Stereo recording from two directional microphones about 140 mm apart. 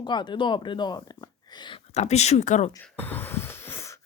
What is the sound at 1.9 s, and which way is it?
Speech, 50° left (ahead or behind).